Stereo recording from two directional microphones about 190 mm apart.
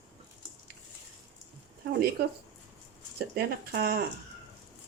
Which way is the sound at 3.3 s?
55° right (ahead or behind).